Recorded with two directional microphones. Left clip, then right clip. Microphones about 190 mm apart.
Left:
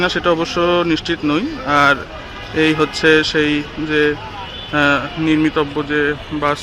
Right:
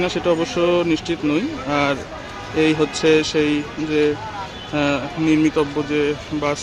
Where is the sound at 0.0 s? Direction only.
5° right (ahead or behind).